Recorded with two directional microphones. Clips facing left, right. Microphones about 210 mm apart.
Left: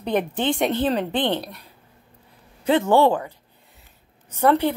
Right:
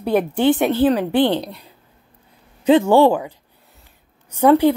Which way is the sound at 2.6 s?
15° right (ahead or behind).